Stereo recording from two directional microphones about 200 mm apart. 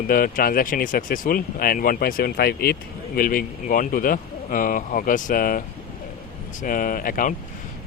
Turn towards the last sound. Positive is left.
turn(degrees=45)  # may be behind; listen again after turning